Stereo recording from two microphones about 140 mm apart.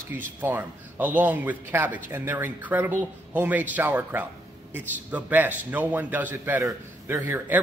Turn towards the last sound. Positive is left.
turn(degrees=-15)  # may be behind; listen again after turning